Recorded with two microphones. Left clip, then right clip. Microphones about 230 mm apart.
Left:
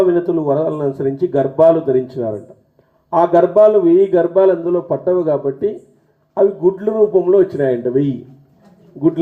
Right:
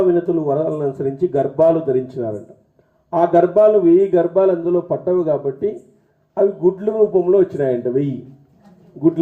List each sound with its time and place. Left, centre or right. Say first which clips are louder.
0.1 s a man's voice: left 2 dB; left